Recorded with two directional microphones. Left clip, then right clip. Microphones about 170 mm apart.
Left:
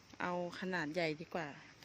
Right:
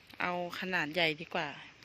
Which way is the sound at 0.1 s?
10° left (ahead or behind).